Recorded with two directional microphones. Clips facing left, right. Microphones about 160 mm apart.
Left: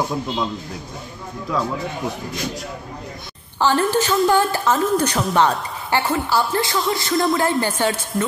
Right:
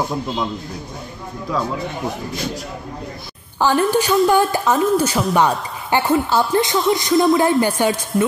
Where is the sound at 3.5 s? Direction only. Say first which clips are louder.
Right 2 dB; 15° right (ahead or behind).